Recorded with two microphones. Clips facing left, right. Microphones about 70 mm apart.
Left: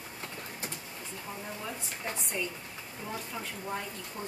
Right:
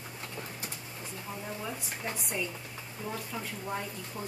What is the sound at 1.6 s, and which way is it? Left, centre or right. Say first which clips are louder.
Speech: left 1 dB; centre.